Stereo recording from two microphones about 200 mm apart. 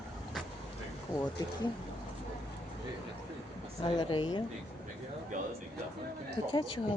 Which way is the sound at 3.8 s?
25° left (ahead or behind).